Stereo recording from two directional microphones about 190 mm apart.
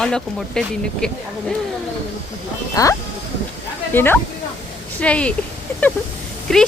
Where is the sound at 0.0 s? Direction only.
5° left (ahead or behind).